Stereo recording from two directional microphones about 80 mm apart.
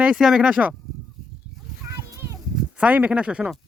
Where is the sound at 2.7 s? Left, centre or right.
Centre.